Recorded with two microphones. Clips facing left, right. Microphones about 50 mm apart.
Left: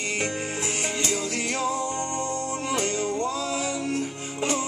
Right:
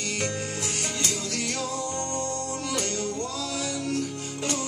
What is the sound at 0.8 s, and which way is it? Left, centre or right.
Music, left.